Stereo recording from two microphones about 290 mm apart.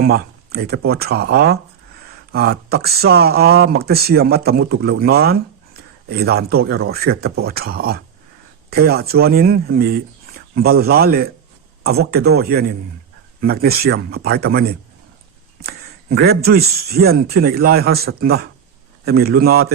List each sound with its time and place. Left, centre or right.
0.0 s speech: right